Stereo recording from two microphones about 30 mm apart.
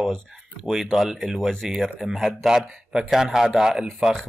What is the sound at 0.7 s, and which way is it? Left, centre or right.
Speech, centre.